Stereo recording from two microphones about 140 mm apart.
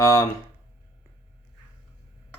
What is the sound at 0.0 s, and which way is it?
Speech, 20° left (ahead or behind).